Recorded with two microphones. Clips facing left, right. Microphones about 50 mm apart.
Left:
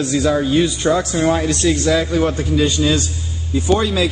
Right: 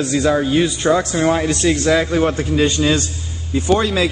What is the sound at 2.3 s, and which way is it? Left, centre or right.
Speech, right.